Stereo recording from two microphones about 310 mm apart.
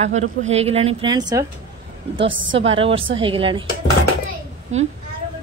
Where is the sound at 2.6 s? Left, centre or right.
Centre.